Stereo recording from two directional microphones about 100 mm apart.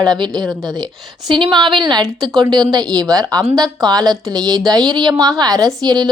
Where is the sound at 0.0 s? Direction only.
45° right (ahead or behind).